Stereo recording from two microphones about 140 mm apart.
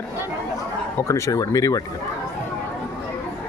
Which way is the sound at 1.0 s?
20° left (ahead or behind).